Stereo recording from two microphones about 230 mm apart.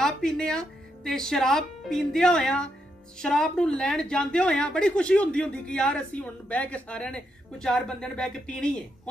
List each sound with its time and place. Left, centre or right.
0.0 s a woman's voice: centre